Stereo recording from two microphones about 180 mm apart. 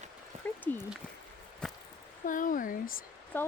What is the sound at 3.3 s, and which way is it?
Speech, 10° left (ahead or behind).